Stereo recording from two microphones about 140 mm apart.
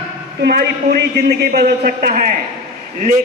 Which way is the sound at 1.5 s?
90° right.